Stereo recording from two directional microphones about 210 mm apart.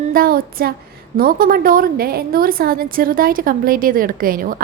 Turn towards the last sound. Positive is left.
turn(degrees=-40)  # may be behind; listen again after turning